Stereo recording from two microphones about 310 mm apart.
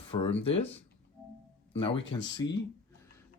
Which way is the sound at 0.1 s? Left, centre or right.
Centre.